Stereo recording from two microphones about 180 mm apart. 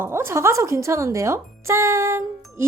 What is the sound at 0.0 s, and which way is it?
Speech, 15° right (ahead or behind).